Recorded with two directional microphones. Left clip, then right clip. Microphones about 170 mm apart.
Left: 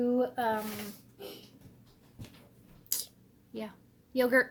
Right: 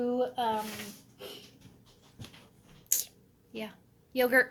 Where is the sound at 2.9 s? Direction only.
15° left (ahead or behind).